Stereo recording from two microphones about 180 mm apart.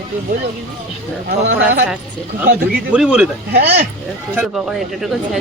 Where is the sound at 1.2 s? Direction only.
75° right (ahead or behind).